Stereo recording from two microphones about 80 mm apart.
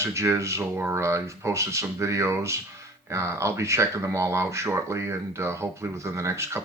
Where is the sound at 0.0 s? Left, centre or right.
Right.